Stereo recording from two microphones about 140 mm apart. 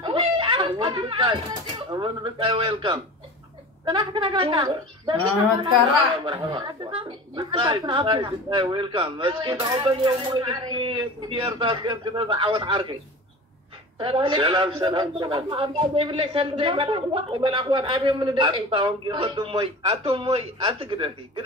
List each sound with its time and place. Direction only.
0.0 s a sound: 35° right (ahead or behind)
1.5 s a man's voice: 30° right (ahead or behind)
6.1 s a man's voice: 35° right (ahead or behind)
13.9 s a man's voice: 35° right (ahead or behind)